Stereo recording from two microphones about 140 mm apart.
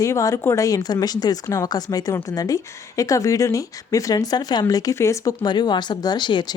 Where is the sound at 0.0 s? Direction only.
20° left (ahead or behind).